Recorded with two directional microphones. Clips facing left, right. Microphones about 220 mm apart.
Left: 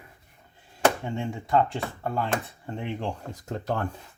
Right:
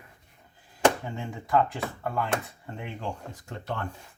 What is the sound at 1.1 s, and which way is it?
Speech, 30° left (ahead or behind).